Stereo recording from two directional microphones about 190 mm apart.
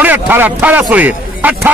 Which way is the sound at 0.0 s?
10° right (ahead or behind).